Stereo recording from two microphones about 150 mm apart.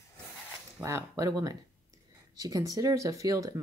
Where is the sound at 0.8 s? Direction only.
20° right (ahead or behind).